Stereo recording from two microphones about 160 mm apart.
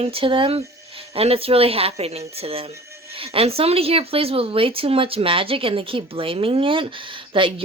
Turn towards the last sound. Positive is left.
turn(degrees=-35)  # may be behind; listen again after turning